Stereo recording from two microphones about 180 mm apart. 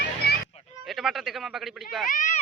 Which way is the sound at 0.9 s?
Centre (ahead or behind).